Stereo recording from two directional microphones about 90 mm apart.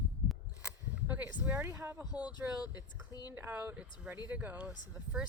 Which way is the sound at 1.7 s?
25° right (ahead or behind).